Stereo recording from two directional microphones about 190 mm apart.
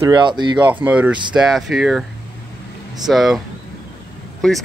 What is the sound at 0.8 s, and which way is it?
Speech, 5° right (ahead or behind).